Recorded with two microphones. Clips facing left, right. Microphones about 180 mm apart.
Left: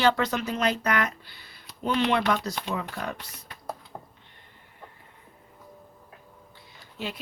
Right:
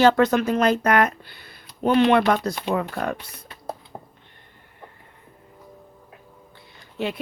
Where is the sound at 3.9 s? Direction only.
20° right (ahead or behind).